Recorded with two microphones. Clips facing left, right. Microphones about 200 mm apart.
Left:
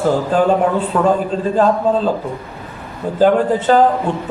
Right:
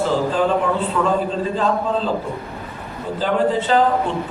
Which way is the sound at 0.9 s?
55° left (ahead or behind).